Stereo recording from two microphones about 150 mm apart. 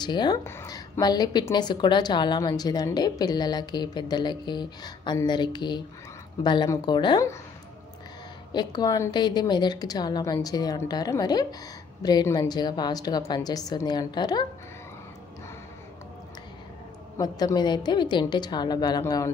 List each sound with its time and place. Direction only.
0.0 s a woman's voice: 30° left (ahead or behind)
0.4 s a woman's voice: 15° left (ahead or behind)
8.5 s a woman's voice: 30° left (ahead or behind)
17.2 s a woman's voice: 25° left (ahead or behind)